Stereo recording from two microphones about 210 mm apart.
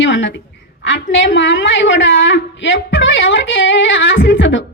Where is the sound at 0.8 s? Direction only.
60° left (ahead or behind).